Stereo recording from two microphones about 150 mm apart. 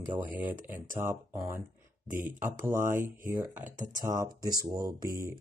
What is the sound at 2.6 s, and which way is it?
Speech, 15° right (ahead or behind).